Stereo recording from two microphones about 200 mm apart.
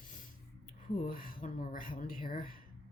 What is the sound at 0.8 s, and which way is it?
Speech, 45° left (ahead or behind).